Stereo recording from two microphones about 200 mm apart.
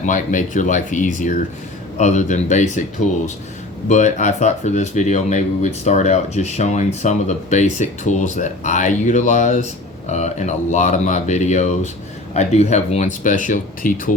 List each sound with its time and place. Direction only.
0.0 s speech: 40° left (ahead or behind)
3.8 s speech: 35° left (ahead or behind)